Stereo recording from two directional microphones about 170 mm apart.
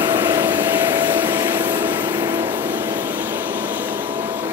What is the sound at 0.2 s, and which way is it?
Vehicle, 15° right (ahead or behind).